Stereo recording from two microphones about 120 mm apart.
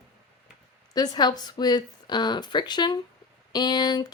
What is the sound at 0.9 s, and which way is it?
Speech, 35° left (ahead or behind).